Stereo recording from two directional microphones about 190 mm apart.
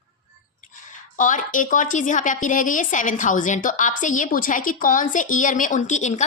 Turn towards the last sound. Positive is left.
turn(degrees=40)  # may be behind; listen again after turning